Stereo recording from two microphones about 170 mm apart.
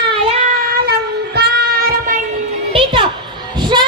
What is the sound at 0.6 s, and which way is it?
Cat, 65° right (ahead or behind).